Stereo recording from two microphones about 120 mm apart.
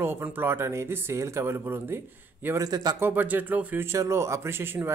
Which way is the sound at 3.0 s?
15° right (ahead or behind).